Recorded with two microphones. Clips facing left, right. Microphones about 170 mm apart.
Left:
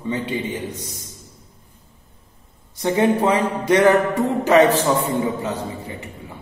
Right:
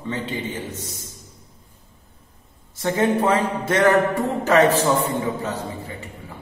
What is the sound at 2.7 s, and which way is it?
A man's voice, 15° left (ahead or behind).